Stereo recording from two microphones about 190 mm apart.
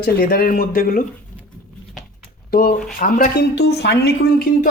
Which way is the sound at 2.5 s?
55° left (ahead or behind).